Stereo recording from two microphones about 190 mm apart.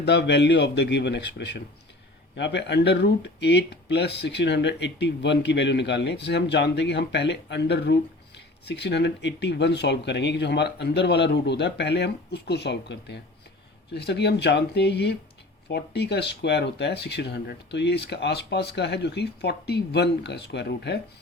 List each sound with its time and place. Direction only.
0.0 s speech: 65° left (ahead or behind)